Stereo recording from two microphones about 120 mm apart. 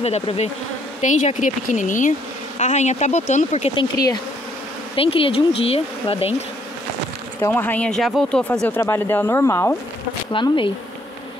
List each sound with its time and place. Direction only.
0.0 s bee: 60° left (ahead or behind)
1.0 s speech: 90° left
2.6 s speech: 70° left (ahead or behind)
3.7 s speech: 35° left (ahead or behind)
4.9 s speech: 50° left (ahead or behind)
7.4 s speech: 15° left (ahead or behind)
8.6 s speech: 20° left (ahead or behind)
10.3 s speech: 45° left (ahead or behind)